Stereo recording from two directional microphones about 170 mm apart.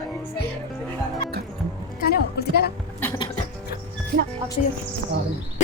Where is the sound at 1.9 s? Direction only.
65° left (ahead or behind).